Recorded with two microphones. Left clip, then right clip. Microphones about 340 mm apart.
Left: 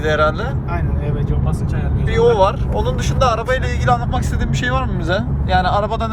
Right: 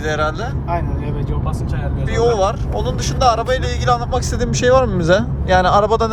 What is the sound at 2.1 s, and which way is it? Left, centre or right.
Speech, centre.